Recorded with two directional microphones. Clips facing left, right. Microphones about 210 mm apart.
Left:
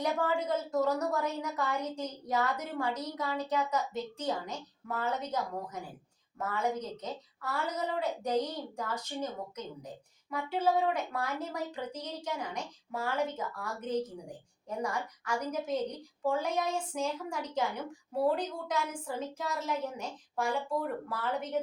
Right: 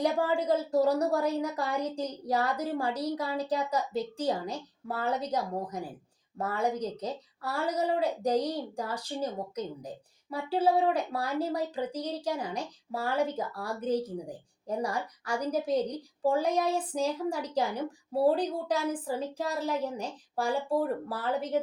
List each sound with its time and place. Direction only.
0.0 s a woman's voice: 35° right (ahead or behind)